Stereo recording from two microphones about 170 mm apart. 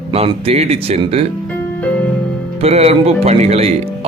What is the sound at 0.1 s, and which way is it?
Speech, 35° right (ahead or behind).